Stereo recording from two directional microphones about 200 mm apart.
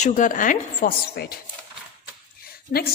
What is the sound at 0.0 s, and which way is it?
A woman's voice, 40° left (ahead or behind).